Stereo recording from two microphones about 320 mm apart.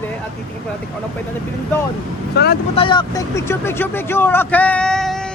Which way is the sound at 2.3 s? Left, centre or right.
Left.